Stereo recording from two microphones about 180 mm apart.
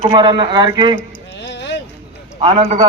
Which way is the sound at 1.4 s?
75° left (ahead or behind).